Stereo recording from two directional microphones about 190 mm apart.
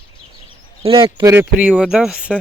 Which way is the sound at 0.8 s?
30° right (ahead or behind).